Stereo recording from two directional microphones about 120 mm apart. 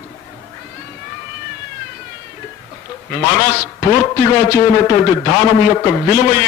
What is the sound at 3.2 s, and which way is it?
A man's voice, 25° left (ahead or behind).